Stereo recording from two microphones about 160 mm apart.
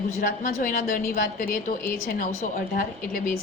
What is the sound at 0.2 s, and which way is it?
A woman's voice, 60° left (ahead or behind).